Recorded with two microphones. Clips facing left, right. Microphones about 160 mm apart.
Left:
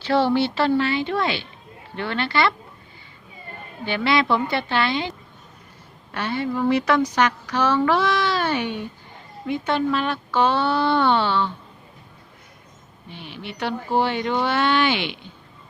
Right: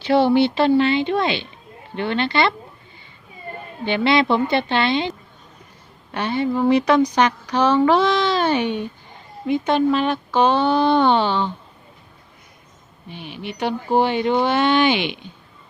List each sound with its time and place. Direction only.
0.0 s speech: 15° right (ahead or behind)
3.8 s speech: 20° right (ahead or behind)
13.1 s speech: 15° right (ahead or behind)